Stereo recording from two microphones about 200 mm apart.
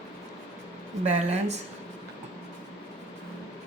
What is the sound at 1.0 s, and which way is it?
Speech, 35° right (ahead or behind).